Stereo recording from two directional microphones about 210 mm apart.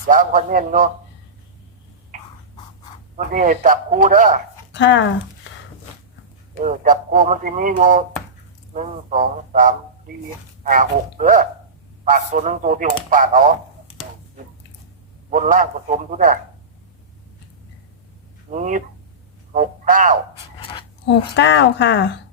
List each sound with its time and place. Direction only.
0.1 s speech: 40° right (ahead or behind)
3.2 s speech: 40° right (ahead or behind)
4.7 s speech: 60° left (ahead or behind)
6.6 s speech: 35° right (ahead or behind)
15.3 s speech: 40° right (ahead or behind)
18.5 s speech: 35° right (ahead or behind)
20.6 s pant: 25° left (ahead or behind)
21.0 s a woman's voice: 60° left (ahead or behind)